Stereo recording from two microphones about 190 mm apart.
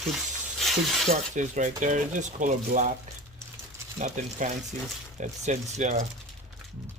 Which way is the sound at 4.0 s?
40° right (ahead or behind).